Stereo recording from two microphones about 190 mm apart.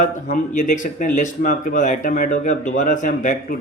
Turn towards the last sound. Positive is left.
turn(degrees=40)  # may be behind; listen again after turning